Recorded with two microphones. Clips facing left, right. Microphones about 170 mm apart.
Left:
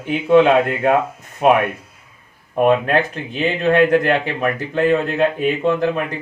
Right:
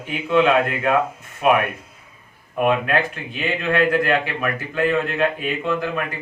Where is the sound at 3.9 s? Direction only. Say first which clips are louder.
Left 3 dB; 25° left (ahead or behind).